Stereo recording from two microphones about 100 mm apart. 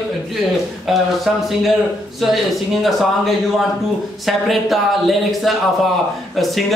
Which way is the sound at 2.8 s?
Centre (ahead or behind).